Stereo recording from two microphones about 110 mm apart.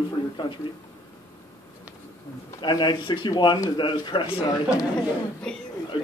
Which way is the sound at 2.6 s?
45° left (ahead or behind).